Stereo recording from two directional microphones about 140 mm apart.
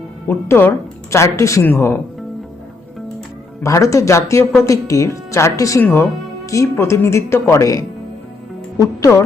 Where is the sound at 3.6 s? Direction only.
20° left (ahead or behind).